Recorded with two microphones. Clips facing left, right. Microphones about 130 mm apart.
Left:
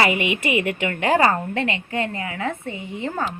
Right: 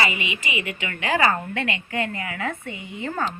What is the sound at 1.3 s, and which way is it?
A woman's voice, 30° left (ahead or behind).